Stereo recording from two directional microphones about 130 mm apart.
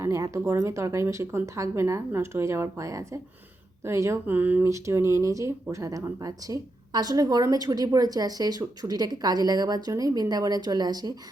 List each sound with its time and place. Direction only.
0.0 s a woman's voice: 25° right (ahead or behind)